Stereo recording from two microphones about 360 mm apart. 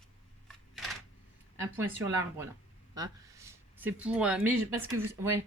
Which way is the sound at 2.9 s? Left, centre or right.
Centre.